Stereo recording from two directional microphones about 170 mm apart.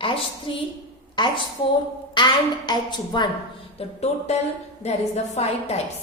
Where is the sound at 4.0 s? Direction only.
40° left (ahead or behind).